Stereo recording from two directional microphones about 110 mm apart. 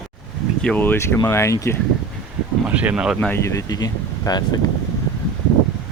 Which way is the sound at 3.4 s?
30° left (ahead or behind).